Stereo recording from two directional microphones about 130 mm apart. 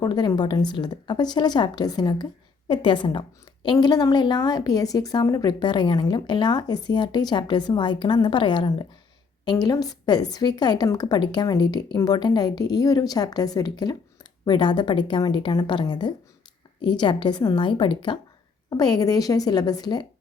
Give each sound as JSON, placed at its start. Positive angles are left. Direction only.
{"t": 0.0, "sound": "a woman's voice", "side_deg": 30}